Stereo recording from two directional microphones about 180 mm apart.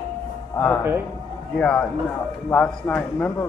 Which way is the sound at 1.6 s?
5° left (ahead or behind).